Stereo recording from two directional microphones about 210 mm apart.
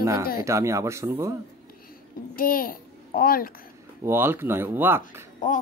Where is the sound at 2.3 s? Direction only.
40° left (ahead or behind).